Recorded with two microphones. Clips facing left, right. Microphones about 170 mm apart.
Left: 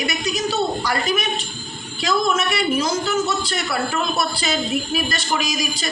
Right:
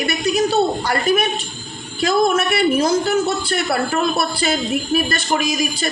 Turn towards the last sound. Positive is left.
turn(degrees=-55)  # may be behind; listen again after turning